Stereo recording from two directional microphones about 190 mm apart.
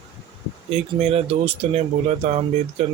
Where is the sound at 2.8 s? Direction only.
35° right (ahead or behind).